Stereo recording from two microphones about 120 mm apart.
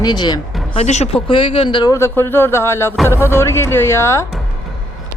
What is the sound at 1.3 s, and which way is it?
Speech, 45° left (ahead or behind).